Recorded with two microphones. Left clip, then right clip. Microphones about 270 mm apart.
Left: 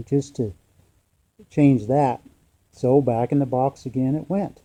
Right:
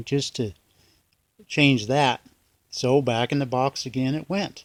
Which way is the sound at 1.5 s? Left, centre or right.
Right.